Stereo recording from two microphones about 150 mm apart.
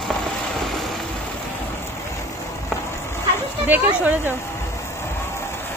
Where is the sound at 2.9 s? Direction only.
15° left (ahead or behind).